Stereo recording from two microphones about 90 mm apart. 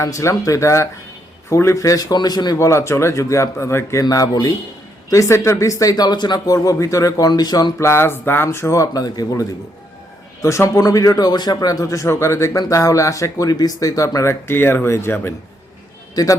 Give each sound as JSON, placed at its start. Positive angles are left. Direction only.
{"t": 0.0, "sound": "speech", "side_deg": 35}
{"t": 2.6, "sound": "speech", "side_deg": 30}
{"t": 4.0, "sound": "speech", "side_deg": 45}
{"t": 7.8, "sound": "speech", "side_deg": 30}
{"t": 16.2, "sound": "speech", "side_deg": 45}